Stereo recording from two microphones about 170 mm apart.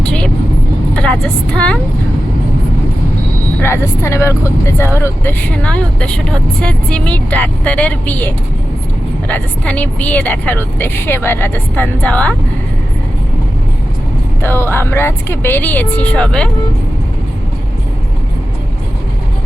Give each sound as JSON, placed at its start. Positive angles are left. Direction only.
{"t": 0.0, "sound": "vehicle", "side_deg": 5}
{"t": 0.9, "sound": "a woman's voice", "side_deg": 5}
{"t": 3.6, "sound": "speech", "side_deg": 15}
{"t": 14.4, "sound": "speech", "side_deg": 15}